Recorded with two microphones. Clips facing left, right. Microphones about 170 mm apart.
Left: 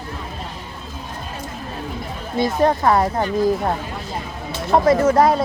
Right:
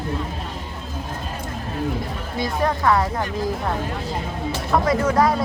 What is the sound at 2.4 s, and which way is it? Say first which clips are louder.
Speech: left 5 dB; 25° left (ahead or behind).